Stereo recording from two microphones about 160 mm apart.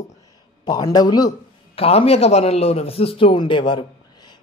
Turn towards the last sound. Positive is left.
turn(degrees=30)  # may be behind; listen again after turning